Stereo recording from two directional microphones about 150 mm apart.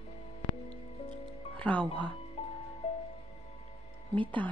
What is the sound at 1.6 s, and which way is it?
Speech, 10° left (ahead or behind).